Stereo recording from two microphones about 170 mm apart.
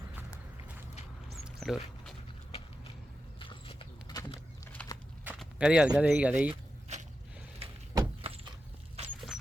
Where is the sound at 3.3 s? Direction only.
30° left (ahead or behind).